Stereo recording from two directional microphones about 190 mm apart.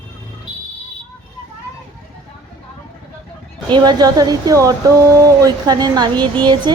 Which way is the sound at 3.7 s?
25° right (ahead or behind).